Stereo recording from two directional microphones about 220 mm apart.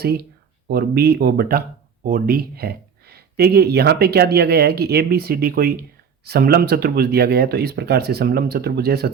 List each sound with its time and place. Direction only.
0.7 s speech: 45° right (ahead or behind)